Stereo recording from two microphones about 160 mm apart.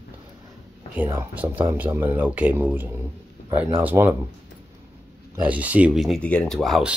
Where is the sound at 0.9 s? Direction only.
15° right (ahead or behind).